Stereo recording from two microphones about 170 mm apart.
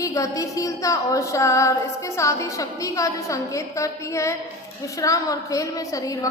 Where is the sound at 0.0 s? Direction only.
20° left (ahead or behind).